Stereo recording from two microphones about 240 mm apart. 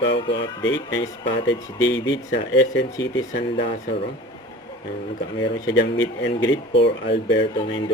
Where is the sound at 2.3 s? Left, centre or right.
Left.